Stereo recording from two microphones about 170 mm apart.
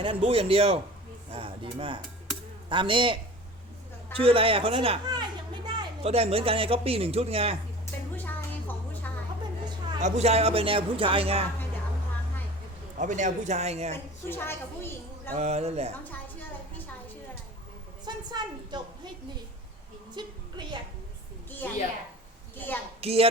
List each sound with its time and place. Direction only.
0.0 s a man's voice: 35° right (ahead or behind)
4.2 s a child's voice: 35° right (ahead or behind)
8.1 s music: 10° left (ahead or behind)
10.0 s a man's voice: 40° right (ahead or behind)
13.0 s a man's voice: 45° right (ahead or behind)
13.9 s a woman's voice: 15° left (ahead or behind)
15.4 s a man's voice: 40° right (ahead or behind)
18.0 s a woman's voice: 25° right (ahead or behind)
20.2 s a woman's voice: 25° right (ahead or behind)
21.6 s a woman's voice: 10° left (ahead or behind)
23.0 s a woman's voice: 35° right (ahead or behind)